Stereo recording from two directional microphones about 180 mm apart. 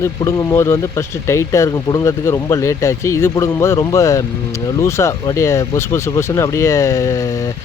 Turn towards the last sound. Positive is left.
turn(degrees=20)  # may be behind; listen again after turning